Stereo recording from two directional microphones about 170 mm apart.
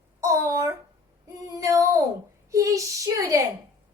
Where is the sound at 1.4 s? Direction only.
20° right (ahead or behind).